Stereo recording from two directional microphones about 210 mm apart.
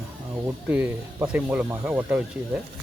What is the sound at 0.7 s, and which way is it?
Speech, 10° right (ahead or behind).